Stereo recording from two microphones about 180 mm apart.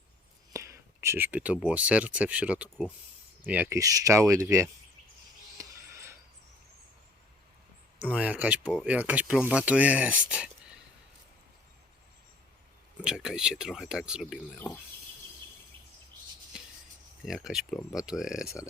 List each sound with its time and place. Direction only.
0.5 s speech: 15° right (ahead or behind)
5.5 s mouse: 15° right (ahead or behind)
8.1 s speech: 5° right (ahead or behind)
13.0 s speech: 5° right (ahead or behind)
16.5 s a sound: 5° right (ahead or behind)
17.2 s speech: centre (ahead or behind)
18.4 s speech: 15° left (ahead or behind)